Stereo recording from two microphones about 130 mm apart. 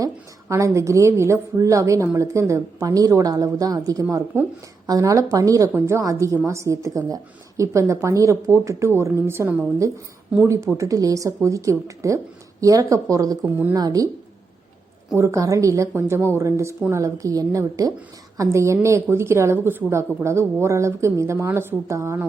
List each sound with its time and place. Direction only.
0.0 s a woman's voice: 25° right (ahead or behind)
13.4 s a woman's voice: 15° right (ahead or behind)
13.7 s a woman's voice: 30° right (ahead or behind)
15.1 s a woman's voice: 25° right (ahead or behind)